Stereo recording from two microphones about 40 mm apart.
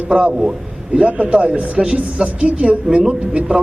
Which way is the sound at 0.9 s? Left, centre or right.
Right.